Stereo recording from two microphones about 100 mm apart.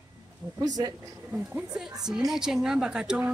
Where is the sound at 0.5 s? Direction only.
40° right (ahead or behind).